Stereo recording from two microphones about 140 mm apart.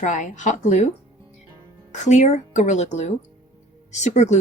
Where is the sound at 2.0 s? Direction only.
55° left (ahead or behind).